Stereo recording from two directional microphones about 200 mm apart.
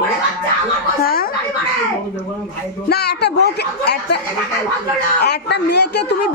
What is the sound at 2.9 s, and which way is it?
A man's voice, 55° left (ahead or behind).